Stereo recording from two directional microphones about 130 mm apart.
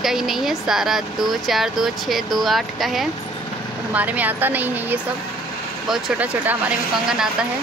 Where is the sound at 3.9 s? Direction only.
10° right (ahead or behind).